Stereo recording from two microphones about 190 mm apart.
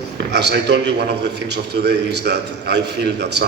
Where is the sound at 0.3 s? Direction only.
60° right (ahead or behind).